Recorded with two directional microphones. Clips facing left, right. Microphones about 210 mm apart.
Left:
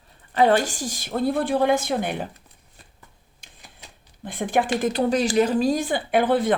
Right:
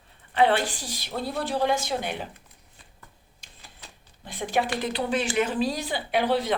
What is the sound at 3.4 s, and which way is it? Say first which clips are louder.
Printer: left 2 dB; 50° left (ahead or behind).